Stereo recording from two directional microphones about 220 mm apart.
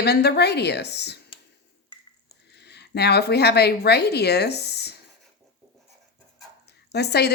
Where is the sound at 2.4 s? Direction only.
50° left (ahead or behind).